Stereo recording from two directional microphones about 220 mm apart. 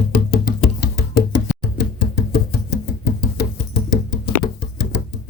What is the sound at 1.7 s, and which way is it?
Chopping, 45° left (ahead or behind).